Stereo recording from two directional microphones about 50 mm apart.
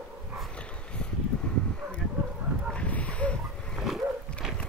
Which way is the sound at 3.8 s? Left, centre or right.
Centre.